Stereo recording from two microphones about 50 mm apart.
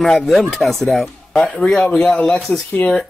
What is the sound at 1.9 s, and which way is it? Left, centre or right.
Speech, left.